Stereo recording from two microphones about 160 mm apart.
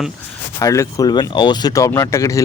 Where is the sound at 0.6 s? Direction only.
20° left (ahead or behind).